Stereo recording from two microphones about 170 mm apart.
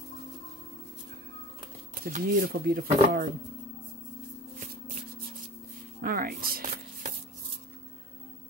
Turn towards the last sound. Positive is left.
turn(degrees=-60)  # may be behind; listen again after turning